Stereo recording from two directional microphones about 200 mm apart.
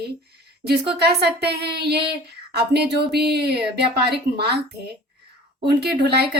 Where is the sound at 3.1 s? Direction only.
55° right (ahead or behind).